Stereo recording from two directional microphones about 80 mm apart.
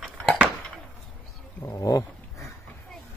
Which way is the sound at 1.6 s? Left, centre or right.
Left.